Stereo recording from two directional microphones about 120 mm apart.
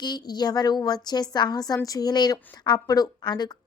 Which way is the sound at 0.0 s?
35° left (ahead or behind).